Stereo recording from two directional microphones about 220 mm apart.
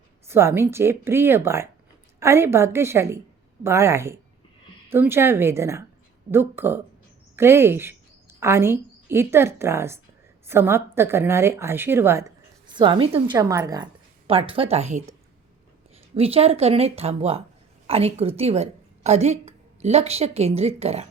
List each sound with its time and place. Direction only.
0.3 s a woman's voice: 10° right (ahead or behind); by 15.1 s 30° right (ahead or behind)
16.1 s a woman's voice: 25° right (ahead or behind)